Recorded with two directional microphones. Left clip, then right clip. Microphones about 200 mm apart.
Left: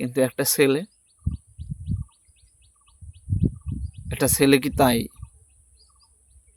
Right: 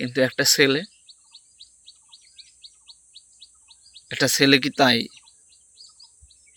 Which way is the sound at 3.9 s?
10° left (ahead or behind).